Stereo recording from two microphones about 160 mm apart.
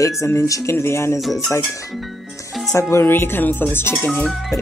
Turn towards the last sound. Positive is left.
turn(degrees=0)  # may be behind; listen again after turning